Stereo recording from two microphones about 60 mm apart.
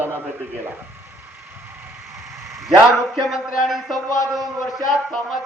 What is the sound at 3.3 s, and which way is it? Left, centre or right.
Speech, centre.